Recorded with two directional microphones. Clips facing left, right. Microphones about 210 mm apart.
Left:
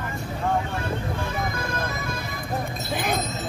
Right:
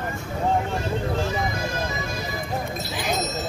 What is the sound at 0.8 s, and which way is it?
Music, 55° left (ahead or behind).